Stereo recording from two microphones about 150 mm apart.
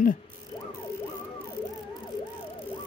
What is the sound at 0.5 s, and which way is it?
Ratchet, 30° left (ahead or behind).